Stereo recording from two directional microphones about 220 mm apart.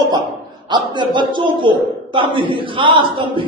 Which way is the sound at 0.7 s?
20° right (ahead or behind).